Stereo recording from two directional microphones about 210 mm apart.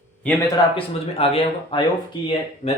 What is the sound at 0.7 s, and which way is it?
Speech, 25° left (ahead or behind).